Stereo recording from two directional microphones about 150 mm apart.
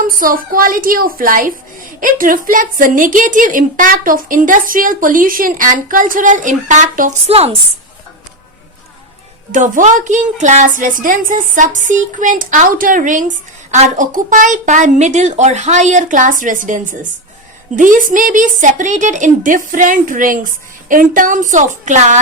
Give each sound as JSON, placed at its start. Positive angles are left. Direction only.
{"t": 0.0, "sound": "a woman's voice", "side_deg": -70}
{"t": 7.3, "sound": "a woman's voice", "side_deg": -40}
{"t": 9.5, "sound": "a woman's voice", "side_deg": -55}